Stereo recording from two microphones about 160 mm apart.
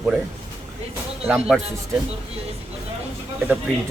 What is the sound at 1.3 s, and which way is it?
Speech, 5° right (ahead or behind).